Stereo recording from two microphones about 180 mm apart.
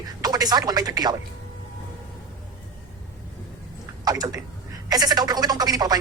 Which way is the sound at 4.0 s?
20° right (ahead or behind).